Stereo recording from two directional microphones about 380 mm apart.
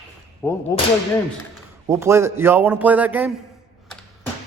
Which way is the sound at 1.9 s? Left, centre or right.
Centre.